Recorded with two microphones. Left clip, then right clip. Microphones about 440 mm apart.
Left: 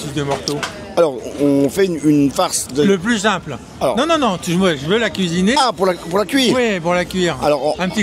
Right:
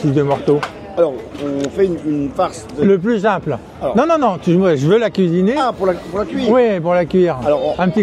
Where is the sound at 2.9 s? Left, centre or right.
Centre.